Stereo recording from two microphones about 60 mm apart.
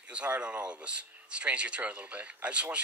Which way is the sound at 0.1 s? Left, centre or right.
Centre.